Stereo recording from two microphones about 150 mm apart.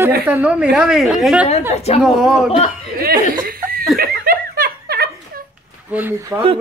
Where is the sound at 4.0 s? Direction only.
80° right.